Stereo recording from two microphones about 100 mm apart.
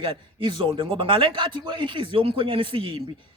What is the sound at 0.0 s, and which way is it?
Speech, 55° right (ahead or behind).